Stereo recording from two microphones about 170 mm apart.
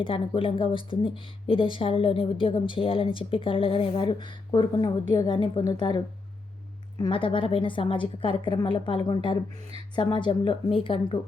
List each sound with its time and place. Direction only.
0.0 s speech: 30° left (ahead or behind)
7.0 s a woman's voice: 30° left (ahead or behind)